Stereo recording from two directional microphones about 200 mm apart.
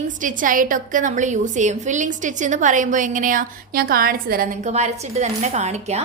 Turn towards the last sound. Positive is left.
turn(degrees=-35)  # may be behind; listen again after turning